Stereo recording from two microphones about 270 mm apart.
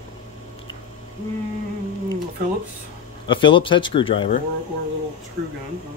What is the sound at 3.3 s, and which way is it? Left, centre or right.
Speech, centre.